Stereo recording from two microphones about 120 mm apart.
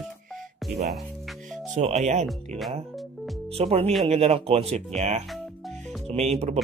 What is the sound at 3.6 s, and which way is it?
Speech, 60° right (ahead or behind).